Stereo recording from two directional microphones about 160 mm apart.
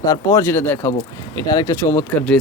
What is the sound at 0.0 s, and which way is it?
Speech, 20° left (ahead or behind).